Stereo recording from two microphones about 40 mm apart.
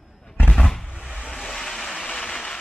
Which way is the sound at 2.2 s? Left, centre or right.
Left.